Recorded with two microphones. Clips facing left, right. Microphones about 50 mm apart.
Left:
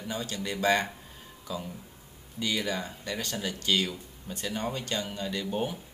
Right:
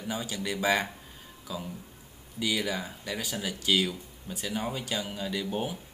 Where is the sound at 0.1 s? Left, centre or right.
Centre.